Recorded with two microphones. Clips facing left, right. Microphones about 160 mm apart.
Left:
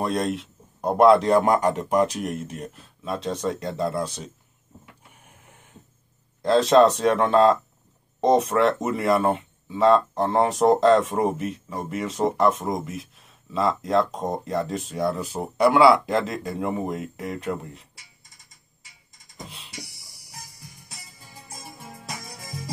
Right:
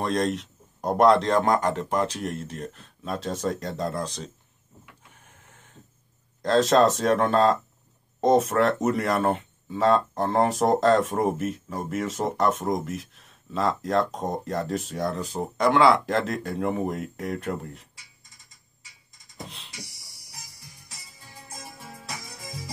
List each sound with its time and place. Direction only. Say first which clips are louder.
0.0 s a man's voice: even; 5° left (ahead or behind)
5.1 s printer: left 2 dB; 15° left (ahead or behind)
6.4 s speech: left 3 dB; centre (ahead or behind)